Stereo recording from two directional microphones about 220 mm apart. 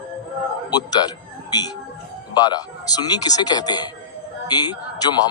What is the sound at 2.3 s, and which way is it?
A man's voice, 20° left (ahead or behind).